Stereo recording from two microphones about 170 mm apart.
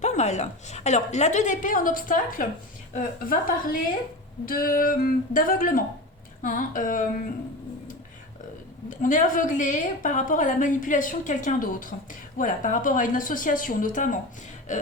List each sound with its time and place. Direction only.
0.0 s a woman's voice: 40° left (ahead or behind)
8.9 s a woman's voice: 50° left (ahead or behind)